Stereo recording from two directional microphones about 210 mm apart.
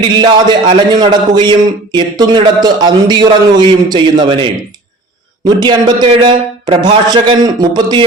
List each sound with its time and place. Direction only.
0.0 s speech: 20° right (ahead or behind)